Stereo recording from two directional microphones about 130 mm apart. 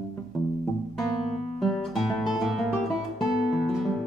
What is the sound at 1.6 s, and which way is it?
Music, centre (ahead or behind).